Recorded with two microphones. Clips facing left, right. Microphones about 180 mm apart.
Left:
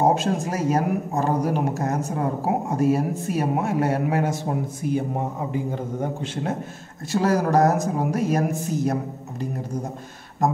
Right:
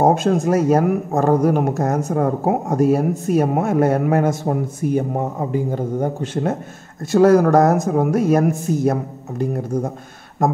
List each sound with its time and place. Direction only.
0.0 s speech: 55° right (ahead or behind)
5.5 s a man's voice: 40° right (ahead or behind)
7.2 s speech: 55° right (ahead or behind)